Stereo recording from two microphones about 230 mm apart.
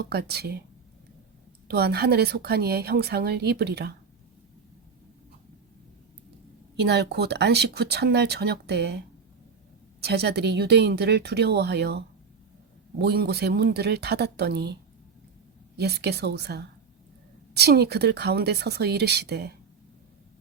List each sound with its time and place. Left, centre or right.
0.0 s speech: right
1.6 s speech: right
6.8 s speech: right
10.0 s speech: right
15.8 s speech: right